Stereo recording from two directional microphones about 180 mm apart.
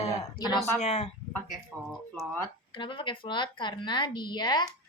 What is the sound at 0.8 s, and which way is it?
Speech, 35° left (ahead or behind).